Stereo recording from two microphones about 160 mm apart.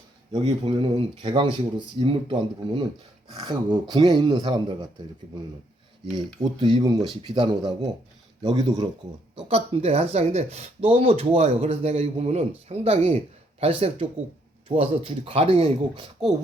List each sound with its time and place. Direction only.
0.3 s speech: 30° right (ahead or behind)
6.6 s speech: 30° right (ahead or behind)